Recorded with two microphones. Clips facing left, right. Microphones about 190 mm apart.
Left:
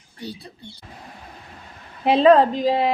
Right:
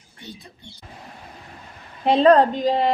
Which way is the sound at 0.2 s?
35° left (ahead or behind).